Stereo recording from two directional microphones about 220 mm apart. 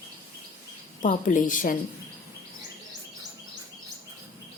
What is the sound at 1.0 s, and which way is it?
Speech, 35° left (ahead or behind).